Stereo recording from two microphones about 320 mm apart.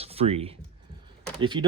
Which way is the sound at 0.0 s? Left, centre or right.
Centre.